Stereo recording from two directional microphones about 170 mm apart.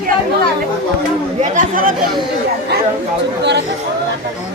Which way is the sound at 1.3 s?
45° right (ahead or behind).